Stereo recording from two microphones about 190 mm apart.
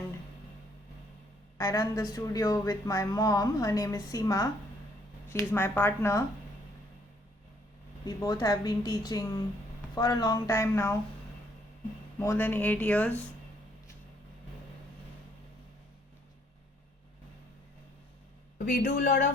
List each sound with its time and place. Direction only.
1.5 s speech: 15° left (ahead or behind)
8.0 s speech: 20° left (ahead or behind)
12.2 s speech: 10° left (ahead or behind)
18.6 s speech: 45° left (ahead or behind)